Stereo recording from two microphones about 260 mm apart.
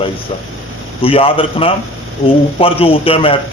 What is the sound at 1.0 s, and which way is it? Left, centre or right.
A man's voice, left.